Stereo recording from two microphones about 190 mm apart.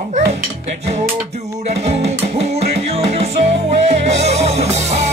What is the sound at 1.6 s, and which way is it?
Music, 35° right (ahead or behind).